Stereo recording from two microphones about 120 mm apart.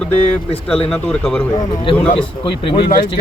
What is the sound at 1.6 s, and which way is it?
Speech, 45° left (ahead or behind).